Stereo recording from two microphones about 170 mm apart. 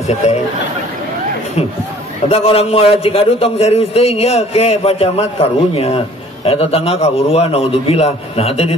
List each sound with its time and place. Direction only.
2.2 s a man's voice: 35° left (ahead or behind)